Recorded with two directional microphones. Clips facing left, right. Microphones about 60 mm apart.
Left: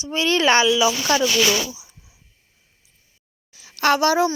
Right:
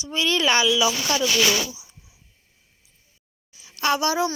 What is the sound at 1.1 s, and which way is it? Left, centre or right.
Speech, left.